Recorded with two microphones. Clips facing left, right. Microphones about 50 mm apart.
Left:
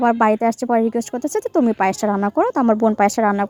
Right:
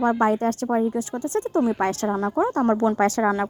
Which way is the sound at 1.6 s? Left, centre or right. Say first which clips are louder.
Left 6 dB; left.